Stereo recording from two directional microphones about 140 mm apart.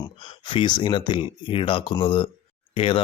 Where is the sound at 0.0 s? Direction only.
35° left (ahead or behind).